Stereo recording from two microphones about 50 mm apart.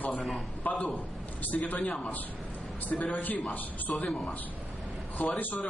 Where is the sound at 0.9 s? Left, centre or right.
Left.